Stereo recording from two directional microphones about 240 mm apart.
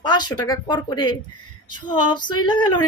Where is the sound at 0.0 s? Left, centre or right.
Centre.